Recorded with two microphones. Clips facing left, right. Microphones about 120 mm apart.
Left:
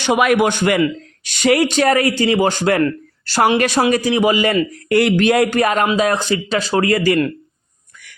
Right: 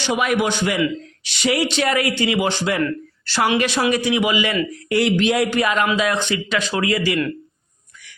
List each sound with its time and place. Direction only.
0.0 s a man's voice: 60° left (ahead or behind); by 7.3 s 40° left (ahead or behind)